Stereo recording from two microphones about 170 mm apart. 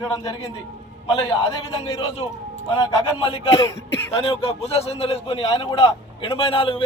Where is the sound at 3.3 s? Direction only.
35° left (ahead or behind).